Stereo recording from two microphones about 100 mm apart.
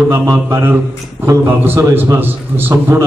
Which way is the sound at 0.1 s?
25° right (ahead or behind).